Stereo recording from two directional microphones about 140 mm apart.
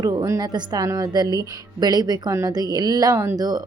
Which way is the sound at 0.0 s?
25° right (ahead or behind).